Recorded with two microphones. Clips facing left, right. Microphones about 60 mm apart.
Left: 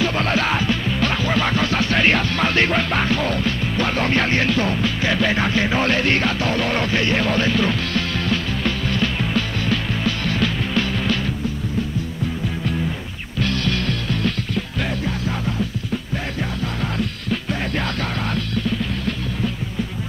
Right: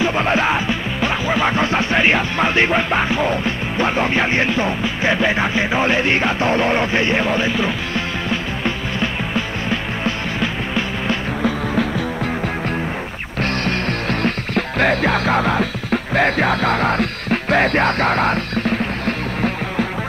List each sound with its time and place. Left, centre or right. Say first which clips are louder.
0.0 s music: right 3 dB; right
11.4 s music: right 6 dB; right
13.4 s music: right 2 dB; right